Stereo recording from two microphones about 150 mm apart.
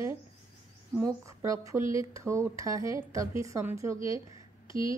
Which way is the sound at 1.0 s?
20° right (ahead or behind).